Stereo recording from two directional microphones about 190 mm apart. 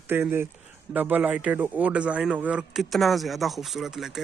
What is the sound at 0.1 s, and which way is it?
Speech, 10° right (ahead or behind).